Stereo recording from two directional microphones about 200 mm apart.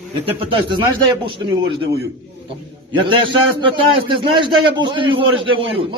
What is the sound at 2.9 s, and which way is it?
A man's voice, 25° right (ahead or behind).